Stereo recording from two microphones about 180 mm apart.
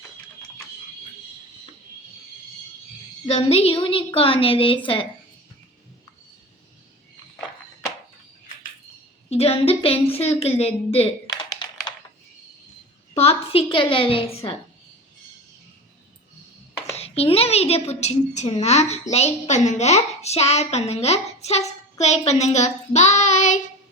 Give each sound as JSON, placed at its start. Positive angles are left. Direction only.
{"t": 3.2, "sound": "a woman's voice", "side_deg": 35}
{"t": 9.3, "sound": "a woman's voice", "side_deg": 35}
{"t": 11.4, "sound": "computer keyboard", "side_deg": 25}
{"t": 13.1, "sound": "a woman's voice", "side_deg": 30}
{"t": 16.9, "sound": "a woman's voice", "side_deg": 35}